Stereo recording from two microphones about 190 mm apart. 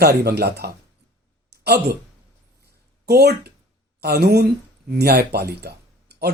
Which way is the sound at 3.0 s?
55° right (ahead or behind).